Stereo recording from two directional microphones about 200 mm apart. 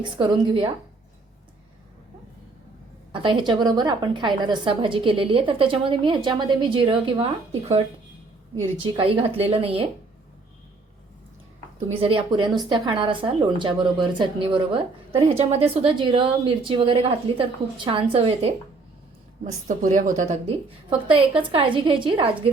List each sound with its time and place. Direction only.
0.2 s speech: 25° right (ahead or behind)
3.1 s speech: 25° right (ahead or behind)
8.5 s speech: 25° right (ahead or behind)
11.9 s speech: 30° right (ahead or behind)
20.5 s speech: 25° right (ahead or behind)